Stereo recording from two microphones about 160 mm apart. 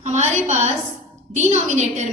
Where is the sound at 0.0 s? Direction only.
45° right (ahead or behind).